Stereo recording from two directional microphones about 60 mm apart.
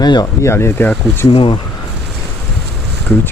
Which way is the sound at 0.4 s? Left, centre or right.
Left.